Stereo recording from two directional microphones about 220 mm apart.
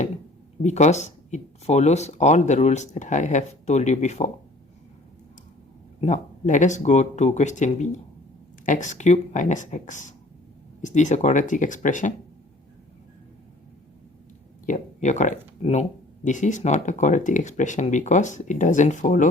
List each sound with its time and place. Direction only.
0.6 s speech: 30° left (ahead or behind)
6.0 s speech: 35° left (ahead or behind)
14.7 s speech: 35° left (ahead or behind)